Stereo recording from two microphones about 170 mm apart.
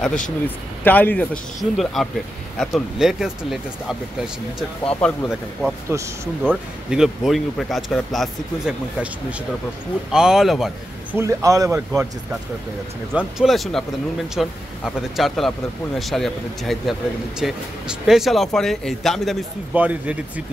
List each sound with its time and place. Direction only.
0.8 s a man's voice: 10° left (ahead or behind)
5.0 s speech: 5° left (ahead or behind)
10.1 s speech: 5° right (ahead or behind)
11.1 s speech: 20° right (ahead or behind)
11.9 s speech: 5° right (ahead or behind)
19.7 s speech: 10° right (ahead or behind)